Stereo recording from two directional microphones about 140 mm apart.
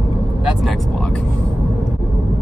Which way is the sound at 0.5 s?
Centre (ahead or behind).